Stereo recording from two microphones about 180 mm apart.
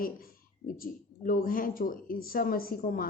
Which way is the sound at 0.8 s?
50° left (ahead or behind).